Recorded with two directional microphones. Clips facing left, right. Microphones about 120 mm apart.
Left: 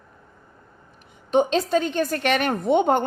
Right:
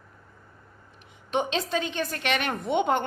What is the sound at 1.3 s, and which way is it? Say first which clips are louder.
A woman's voice: left 7 dB; 40° left (ahead or behind).